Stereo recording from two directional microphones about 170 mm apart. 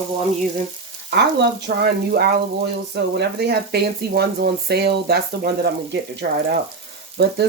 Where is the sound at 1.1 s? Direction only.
80° right.